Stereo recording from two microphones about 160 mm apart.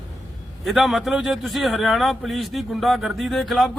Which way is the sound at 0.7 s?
Centre (ahead or behind).